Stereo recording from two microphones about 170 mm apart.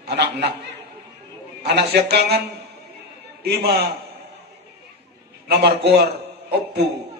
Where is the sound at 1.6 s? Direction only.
75° right (ahead or behind).